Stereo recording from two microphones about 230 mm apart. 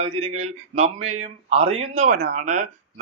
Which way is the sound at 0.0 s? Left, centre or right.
Right.